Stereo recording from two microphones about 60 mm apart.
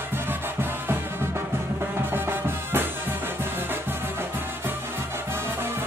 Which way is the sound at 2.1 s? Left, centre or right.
Right.